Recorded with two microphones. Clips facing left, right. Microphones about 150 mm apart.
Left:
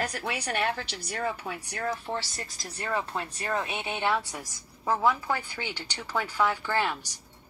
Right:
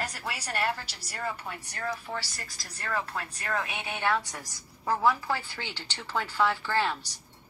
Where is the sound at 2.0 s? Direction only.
25° left (ahead or behind).